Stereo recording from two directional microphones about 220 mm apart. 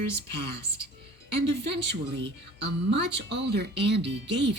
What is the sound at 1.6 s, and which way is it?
Speech, 50° right (ahead or behind).